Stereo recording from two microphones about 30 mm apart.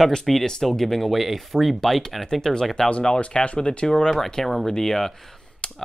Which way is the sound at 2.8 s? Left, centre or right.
Left.